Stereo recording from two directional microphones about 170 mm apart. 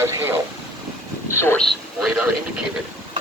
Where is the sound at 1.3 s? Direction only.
15° left (ahead or behind).